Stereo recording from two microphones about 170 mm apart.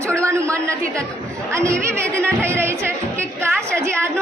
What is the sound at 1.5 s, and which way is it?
Speech, 15° right (ahead or behind).